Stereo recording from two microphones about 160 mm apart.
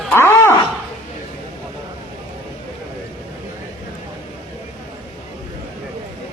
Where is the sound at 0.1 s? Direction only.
15° left (ahead or behind).